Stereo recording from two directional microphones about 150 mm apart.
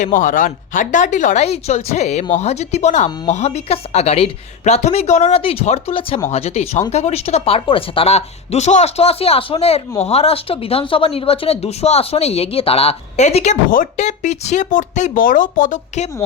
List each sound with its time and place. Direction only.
0.0 s speech: 60° left (ahead or behind)